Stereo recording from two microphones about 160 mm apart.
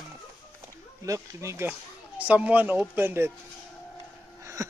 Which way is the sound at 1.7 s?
10° right (ahead or behind).